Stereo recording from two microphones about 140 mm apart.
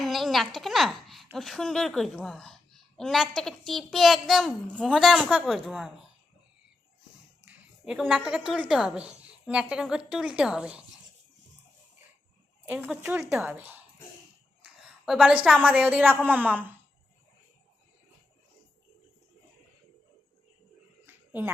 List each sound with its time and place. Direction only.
0.0 s a woman's voice: centre (ahead or behind)
7.4 s a woman's voice: 5° right (ahead or behind)
12.6 s a woman's voice: 10° right (ahead or behind)
14.6 s a sound: 5° right (ahead or behind)
15.5 s a woman's voice: 10° right (ahead or behind)
21.1 s a sound: 15° right (ahead or behind)